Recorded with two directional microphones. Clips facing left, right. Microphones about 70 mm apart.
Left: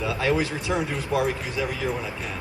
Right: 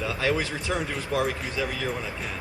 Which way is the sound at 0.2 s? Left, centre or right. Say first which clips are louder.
Left 2 dB; centre.